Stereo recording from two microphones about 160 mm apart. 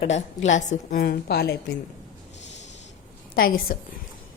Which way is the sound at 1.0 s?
70° left (ahead or behind).